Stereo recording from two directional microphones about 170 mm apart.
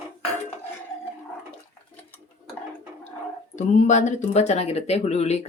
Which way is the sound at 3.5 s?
45° left (ahead or behind).